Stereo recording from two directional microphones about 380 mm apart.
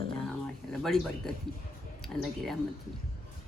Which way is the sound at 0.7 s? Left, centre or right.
Centre.